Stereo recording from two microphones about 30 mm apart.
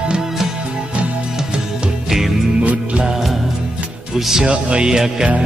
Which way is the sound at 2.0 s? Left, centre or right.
Centre.